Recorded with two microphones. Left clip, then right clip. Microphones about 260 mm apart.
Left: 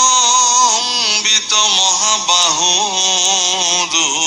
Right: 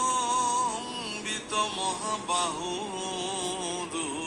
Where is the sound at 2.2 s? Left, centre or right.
Left.